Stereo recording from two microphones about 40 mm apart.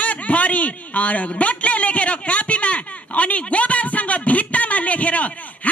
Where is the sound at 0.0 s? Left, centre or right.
Left.